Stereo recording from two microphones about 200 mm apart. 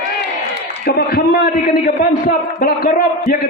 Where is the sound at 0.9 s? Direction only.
50° left (ahead or behind).